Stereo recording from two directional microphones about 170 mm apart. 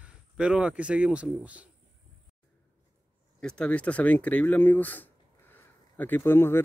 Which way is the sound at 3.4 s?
5° left (ahead or behind).